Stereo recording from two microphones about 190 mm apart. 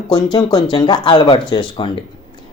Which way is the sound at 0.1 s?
20° left (ahead or behind).